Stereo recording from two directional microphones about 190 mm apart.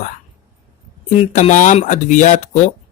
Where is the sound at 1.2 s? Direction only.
40° left (ahead or behind).